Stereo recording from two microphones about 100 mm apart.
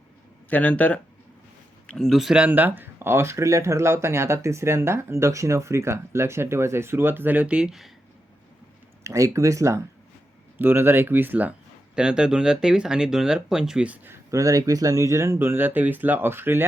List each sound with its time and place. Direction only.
0.5 s speech: 15° left (ahead or behind)
1.9 s speech: centre (ahead or behind)
9.0 s speech: 35° right (ahead or behind); by 14.2 s 15° right (ahead or behind)
14.3 s speech: 35° right (ahead or behind)